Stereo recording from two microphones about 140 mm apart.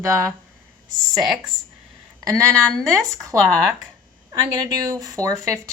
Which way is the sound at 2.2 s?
20° right (ahead or behind).